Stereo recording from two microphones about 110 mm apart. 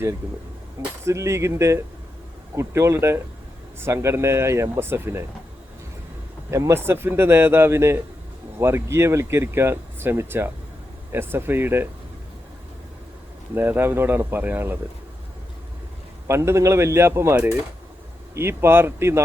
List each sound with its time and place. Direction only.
1.0 s speech: 25° right (ahead or behind)
6.5 s speech: 25° right (ahead or behind)
13.6 s speech: 20° right (ahead or behind)
16.2 s speech: 25° right (ahead or behind)